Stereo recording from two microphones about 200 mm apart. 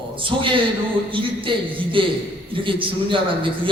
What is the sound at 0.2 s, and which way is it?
A man's voice, 25° right (ahead or behind).